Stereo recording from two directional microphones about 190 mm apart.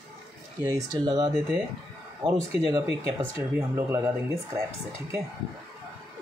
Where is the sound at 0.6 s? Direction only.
20° right (ahead or behind).